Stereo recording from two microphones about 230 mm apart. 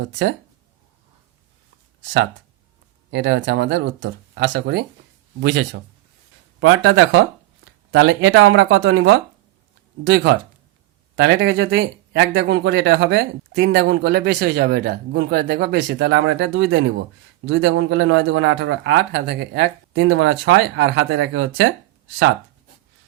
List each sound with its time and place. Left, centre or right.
0.1 s speech: right
3.1 s speech: right
6.6 s speech: right